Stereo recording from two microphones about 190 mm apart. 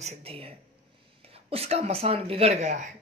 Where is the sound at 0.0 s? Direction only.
35° right (ahead or behind).